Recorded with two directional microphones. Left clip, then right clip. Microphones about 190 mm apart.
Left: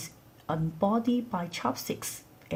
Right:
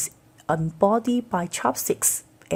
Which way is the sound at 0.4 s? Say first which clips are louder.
Right 8 dB; 45° right (ahead or behind).